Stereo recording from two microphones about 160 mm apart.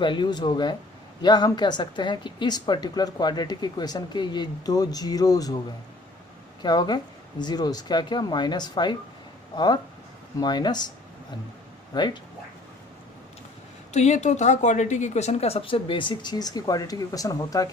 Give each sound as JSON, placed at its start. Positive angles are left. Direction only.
{"t": 0.0, "sound": "a woman's voice", "side_deg": 30}
{"t": 6.6, "sound": "a woman's voice", "side_deg": 25}
{"t": 10.4, "sound": "a woman's voice", "side_deg": 25}
{"t": 11.9, "sound": "a woman's voice", "side_deg": 25}
{"t": 13.9, "sound": "speech", "side_deg": 45}